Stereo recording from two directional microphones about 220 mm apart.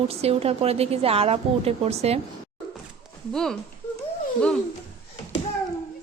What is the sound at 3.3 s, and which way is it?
Speech, centre (ahead or behind).